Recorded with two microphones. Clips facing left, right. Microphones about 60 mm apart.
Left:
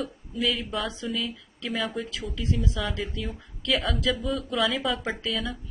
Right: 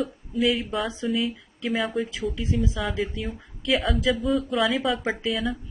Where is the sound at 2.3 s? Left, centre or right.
Centre.